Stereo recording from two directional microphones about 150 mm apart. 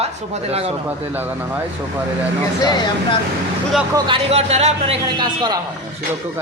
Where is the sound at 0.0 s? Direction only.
45° right (ahead or behind).